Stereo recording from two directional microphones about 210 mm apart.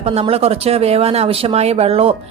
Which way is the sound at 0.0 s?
30° right (ahead or behind).